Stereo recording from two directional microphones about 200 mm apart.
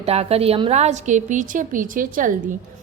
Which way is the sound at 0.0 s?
30° right (ahead or behind).